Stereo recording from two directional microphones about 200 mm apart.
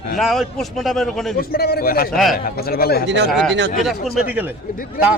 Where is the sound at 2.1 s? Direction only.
Centre (ahead or behind).